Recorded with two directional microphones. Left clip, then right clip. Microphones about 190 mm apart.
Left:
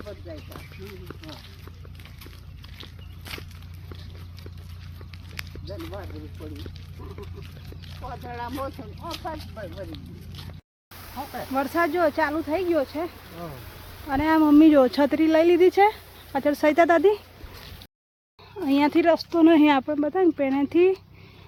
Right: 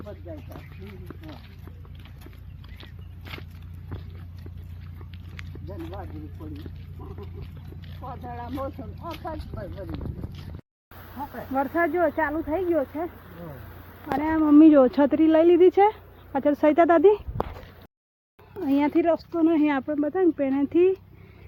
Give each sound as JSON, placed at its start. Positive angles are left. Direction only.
{"t": 2.7, "sound": "walk", "side_deg": -5}
{"t": 8.4, "sound": "speech", "side_deg": -10}
{"t": 9.0, "sound": "speech", "side_deg": 5}
{"t": 11.5, "sound": "speech", "side_deg": 15}
{"t": 14.2, "sound": "speech", "side_deg": 55}
{"t": 14.6, "sound": "speech", "side_deg": 0}
{"t": 18.6, "sound": "speech", "side_deg": 10}
{"t": 19.3, "sound": "speech", "side_deg": 35}
{"t": 19.8, "sound": "speech", "side_deg": 10}